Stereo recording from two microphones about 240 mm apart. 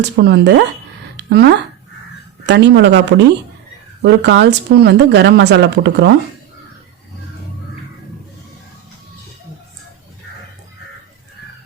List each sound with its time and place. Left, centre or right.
0.0 s speech: right
1.1 s a sound: right
2.5 s speech: right